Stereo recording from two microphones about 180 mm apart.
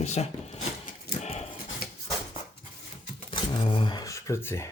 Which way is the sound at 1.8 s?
55° left (ahead or behind).